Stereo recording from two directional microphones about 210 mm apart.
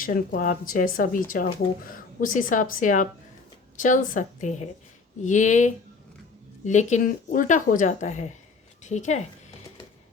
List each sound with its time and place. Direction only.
0.0 s a woman's voice: 40° left (ahead or behind)